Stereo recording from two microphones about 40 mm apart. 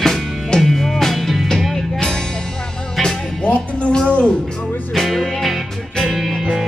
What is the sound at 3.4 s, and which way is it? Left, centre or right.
Music, left.